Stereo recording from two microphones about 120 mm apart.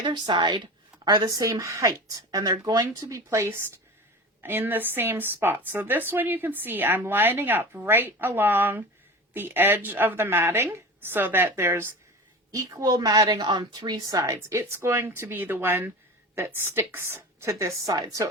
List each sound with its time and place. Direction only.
0.0 s a woman's voice: 40° right (ahead or behind)